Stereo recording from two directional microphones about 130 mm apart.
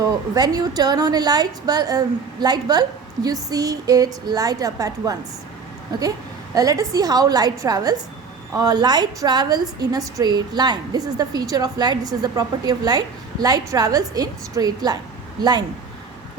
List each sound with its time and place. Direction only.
0.3 s a woman's voice: 30° right (ahead or behind)